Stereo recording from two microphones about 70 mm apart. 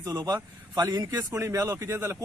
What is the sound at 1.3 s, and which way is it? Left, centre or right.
Speech, right.